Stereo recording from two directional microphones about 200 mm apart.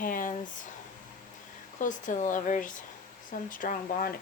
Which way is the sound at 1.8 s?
40° left (ahead or behind).